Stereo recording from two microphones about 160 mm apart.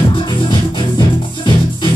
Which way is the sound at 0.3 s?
30° left (ahead or behind).